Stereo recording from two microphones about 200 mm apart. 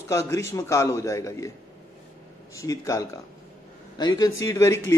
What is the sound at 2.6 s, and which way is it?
A man's voice, 15° left (ahead or behind).